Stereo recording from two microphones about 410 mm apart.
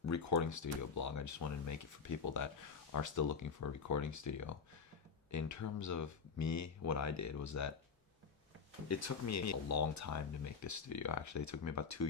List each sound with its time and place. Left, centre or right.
0.0 s speech: left
8.9 s speech: left